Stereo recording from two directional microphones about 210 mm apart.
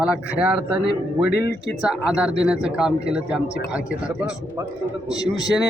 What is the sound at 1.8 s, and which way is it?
Speech, 5° right (ahead or behind).